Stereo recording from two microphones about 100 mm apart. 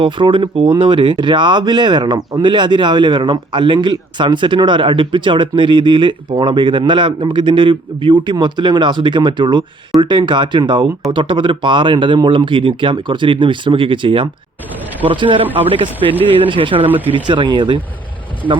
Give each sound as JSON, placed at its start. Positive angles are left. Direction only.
{"t": 0.0, "sound": "speech", "side_deg": -55}
{"t": 16.8, "sound": "speech", "side_deg": -15}
{"t": 17.2, "sound": "speech", "side_deg": -55}